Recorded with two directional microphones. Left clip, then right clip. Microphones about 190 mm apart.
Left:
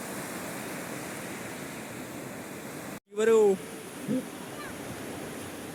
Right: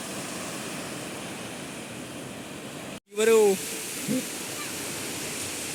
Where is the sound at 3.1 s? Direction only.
Centre (ahead or behind).